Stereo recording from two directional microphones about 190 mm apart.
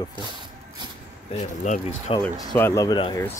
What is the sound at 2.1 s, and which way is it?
Speech, 30° left (ahead or behind).